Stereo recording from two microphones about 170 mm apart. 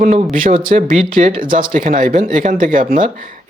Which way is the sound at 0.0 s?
45° right (ahead or behind).